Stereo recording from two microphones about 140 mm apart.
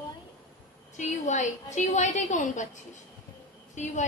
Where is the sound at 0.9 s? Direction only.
60° left (ahead or behind).